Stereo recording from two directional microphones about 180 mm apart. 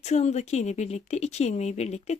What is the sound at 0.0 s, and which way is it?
Speech, 40° left (ahead or behind).